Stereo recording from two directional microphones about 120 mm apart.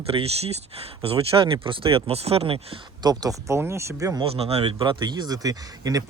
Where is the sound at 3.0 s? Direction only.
30° right (ahead or behind).